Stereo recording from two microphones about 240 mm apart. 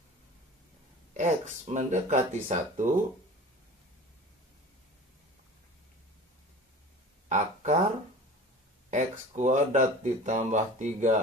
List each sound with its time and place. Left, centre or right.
1.1 s speech: right
7.2 s a sound: right
8.9 s speech: right